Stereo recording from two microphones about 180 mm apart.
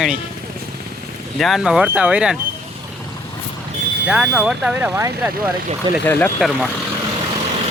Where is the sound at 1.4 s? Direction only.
Centre (ahead or behind).